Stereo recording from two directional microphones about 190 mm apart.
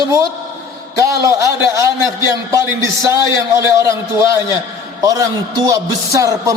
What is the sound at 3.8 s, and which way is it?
A man's voice, 15° right (ahead or behind).